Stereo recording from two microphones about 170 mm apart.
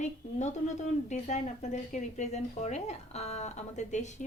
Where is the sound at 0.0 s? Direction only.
45° left (ahead or behind).